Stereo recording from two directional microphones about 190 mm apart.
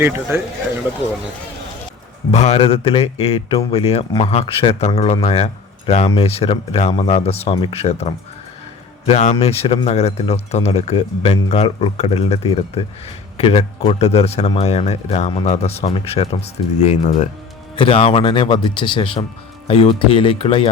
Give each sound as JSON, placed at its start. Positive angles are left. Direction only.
{"t": 0.0, "sound": "speech", "side_deg": -10}
{"t": 2.3, "sound": "a man's voice", "side_deg": 35}